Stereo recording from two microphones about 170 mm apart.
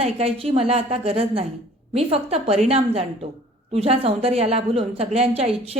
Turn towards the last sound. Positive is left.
turn(degrees=-35)  # may be behind; listen again after turning